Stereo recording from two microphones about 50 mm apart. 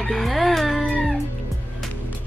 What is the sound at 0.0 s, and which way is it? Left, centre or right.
Music, centre.